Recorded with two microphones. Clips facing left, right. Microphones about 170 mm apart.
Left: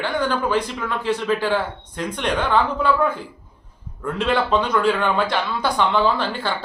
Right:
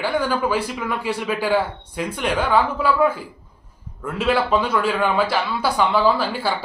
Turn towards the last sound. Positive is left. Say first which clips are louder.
# right 2 dB
turn(degrees=-10)  # may be behind; listen again after turning